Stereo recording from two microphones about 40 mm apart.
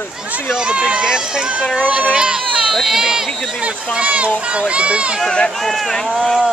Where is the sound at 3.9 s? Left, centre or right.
Right.